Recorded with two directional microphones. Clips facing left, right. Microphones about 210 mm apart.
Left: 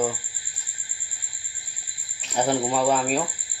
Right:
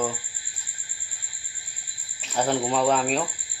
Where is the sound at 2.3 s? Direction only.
15° left (ahead or behind).